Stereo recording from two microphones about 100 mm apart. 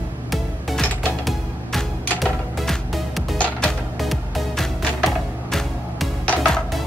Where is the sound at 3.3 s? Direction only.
15° left (ahead or behind).